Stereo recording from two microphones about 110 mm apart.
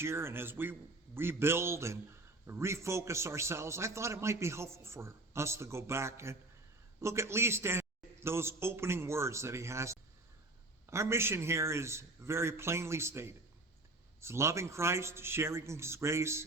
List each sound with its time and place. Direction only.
0.0 s a man's voice: 20° right (ahead or behind)